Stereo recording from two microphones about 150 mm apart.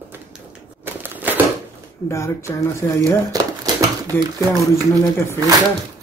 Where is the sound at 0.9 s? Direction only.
10° right (ahead or behind).